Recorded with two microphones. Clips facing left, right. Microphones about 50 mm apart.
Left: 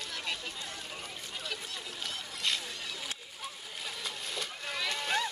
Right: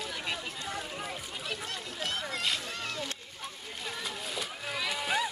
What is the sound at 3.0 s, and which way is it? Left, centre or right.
Splash, centre.